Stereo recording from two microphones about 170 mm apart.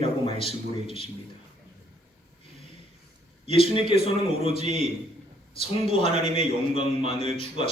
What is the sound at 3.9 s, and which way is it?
Speech, 40° right (ahead or behind).